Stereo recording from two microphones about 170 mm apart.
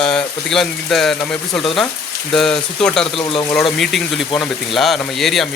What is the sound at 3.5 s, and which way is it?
Speech, centre (ahead or behind).